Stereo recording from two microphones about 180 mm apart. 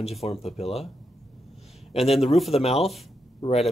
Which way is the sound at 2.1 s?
Centre (ahead or behind).